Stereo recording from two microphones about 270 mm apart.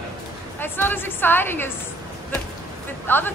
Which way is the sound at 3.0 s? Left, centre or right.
Centre.